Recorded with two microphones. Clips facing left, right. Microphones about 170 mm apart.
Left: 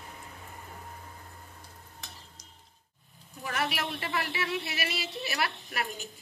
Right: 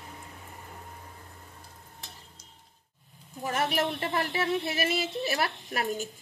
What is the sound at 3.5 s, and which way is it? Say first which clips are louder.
Speech: right 4 dB; 45° right (ahead or behind).